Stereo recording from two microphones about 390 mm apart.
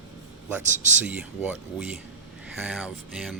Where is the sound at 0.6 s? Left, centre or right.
Centre.